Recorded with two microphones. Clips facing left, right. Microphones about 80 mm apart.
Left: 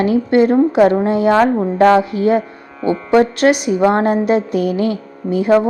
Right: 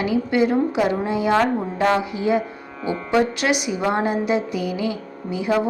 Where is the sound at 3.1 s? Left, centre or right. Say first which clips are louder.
Left 7 dB; left.